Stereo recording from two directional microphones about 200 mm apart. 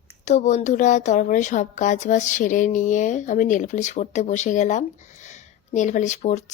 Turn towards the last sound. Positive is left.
turn(degrees=35)  # may be behind; listen again after turning